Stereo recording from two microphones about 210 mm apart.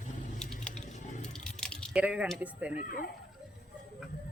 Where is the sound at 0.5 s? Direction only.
5° left (ahead or behind).